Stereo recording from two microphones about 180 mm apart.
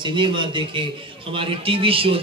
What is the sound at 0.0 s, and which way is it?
A man's voice, 25° right (ahead or behind).